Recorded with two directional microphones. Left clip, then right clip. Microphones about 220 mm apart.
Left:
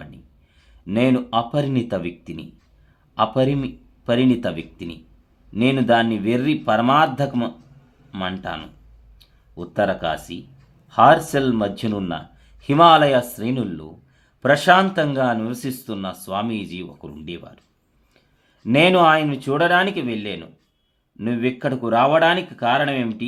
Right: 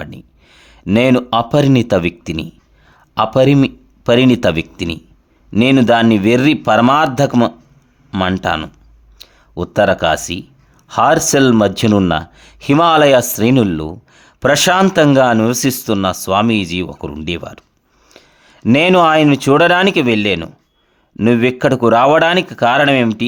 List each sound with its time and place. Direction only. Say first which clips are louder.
0.6 s speech: right 7 dB; 45° right (ahead or behind)